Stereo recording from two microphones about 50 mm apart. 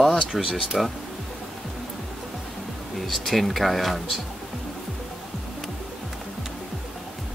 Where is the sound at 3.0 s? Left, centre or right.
Centre.